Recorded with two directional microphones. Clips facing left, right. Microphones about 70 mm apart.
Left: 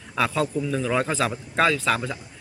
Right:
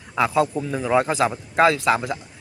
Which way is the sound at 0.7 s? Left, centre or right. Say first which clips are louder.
Right 4 dB; centre.